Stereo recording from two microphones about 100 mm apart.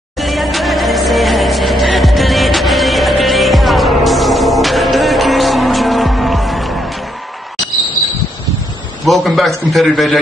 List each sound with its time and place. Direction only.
0.2 s music: centre (ahead or behind)
9.0 s a man's voice: centre (ahead or behind)